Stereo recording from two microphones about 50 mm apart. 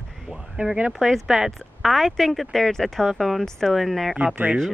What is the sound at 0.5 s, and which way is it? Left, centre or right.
Speech, right.